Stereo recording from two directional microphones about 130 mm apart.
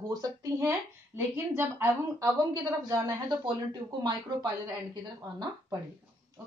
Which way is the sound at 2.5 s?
35° right (ahead or behind).